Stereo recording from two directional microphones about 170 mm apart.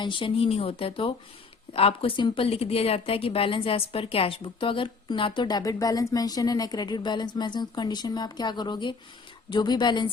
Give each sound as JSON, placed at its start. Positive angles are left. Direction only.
{"t": 0.0, "sound": "a woman's voice", "side_deg": 30}